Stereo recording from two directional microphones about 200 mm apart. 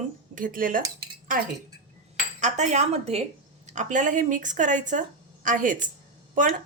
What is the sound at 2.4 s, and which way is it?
Speech, 35° right (ahead or behind).